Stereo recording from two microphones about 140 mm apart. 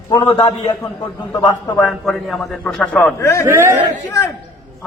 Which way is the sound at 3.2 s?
20° left (ahead or behind).